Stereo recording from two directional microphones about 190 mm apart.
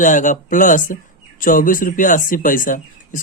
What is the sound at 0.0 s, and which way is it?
Speech, 40° left (ahead or behind).